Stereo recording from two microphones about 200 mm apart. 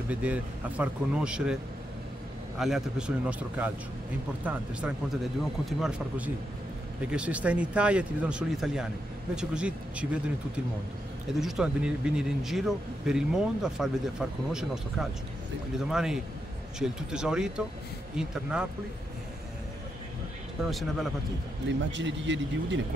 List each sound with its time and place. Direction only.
0.1 s a man's voice: 5° right (ahead or behind)
2.6 s a man's voice: 5° right (ahead or behind)
11.3 s a man's voice: 5° right (ahead or behind)
20.6 s a man's voice: centre (ahead or behind)
21.6 s speech: 65° right (ahead or behind)